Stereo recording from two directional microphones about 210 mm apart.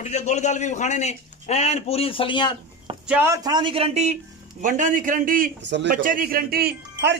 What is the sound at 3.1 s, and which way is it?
Speech, 10° right (ahead or behind).